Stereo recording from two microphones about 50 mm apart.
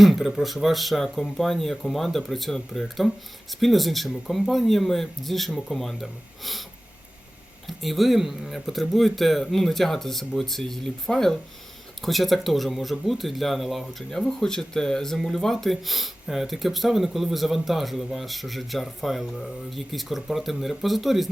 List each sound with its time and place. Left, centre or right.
0.0 s a man's voice: centre
7.7 s a man's voice: centre